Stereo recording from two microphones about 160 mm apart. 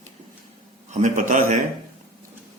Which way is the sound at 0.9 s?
50° right (ahead or behind).